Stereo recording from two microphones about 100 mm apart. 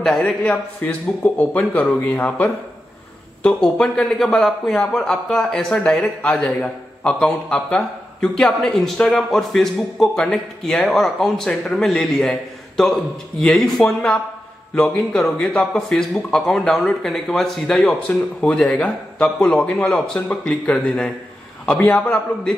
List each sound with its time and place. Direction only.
0.8 s a man's voice: 15° left (ahead or behind)